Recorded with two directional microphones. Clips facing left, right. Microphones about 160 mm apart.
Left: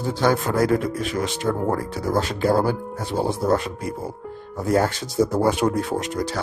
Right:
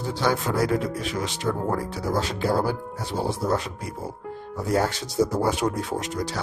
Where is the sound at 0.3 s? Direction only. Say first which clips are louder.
Left 4 dB; 50° left (ahead or behind).